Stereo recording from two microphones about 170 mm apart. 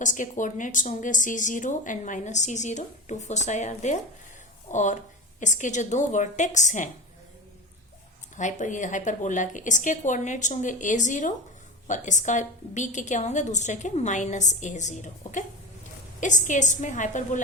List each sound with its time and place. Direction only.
0.0 s speech: 50° left (ahead or behind)
8.4 s speech: 45° left (ahead or behind)